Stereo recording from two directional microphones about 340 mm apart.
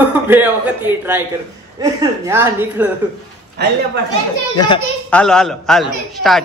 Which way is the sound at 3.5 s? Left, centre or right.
Right.